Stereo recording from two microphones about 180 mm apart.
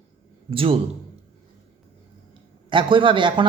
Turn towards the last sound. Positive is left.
turn(degrees=-25)  # may be behind; listen again after turning